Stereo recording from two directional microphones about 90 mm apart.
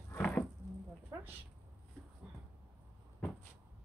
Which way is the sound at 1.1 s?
35° right (ahead or behind).